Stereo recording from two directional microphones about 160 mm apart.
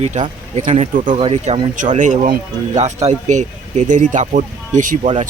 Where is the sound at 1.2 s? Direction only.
35° right (ahead or behind).